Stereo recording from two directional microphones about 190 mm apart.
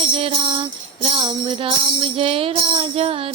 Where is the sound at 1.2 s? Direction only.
30° right (ahead or behind).